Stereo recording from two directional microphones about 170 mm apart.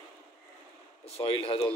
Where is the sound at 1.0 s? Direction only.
35° left (ahead or behind).